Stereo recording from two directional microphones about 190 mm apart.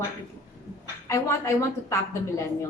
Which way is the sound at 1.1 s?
15° left (ahead or behind).